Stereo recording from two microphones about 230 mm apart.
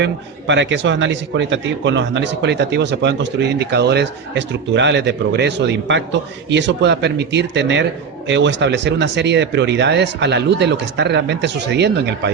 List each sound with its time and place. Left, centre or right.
0.0 s a man's voice: right